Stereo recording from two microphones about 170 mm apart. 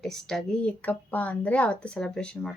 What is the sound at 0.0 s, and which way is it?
A woman's voice, centre (ahead or behind).